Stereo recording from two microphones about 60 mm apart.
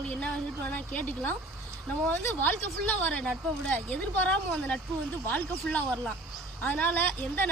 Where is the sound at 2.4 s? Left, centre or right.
Left.